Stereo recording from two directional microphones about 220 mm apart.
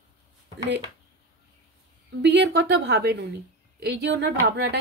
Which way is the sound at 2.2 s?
50° right (ahead or behind).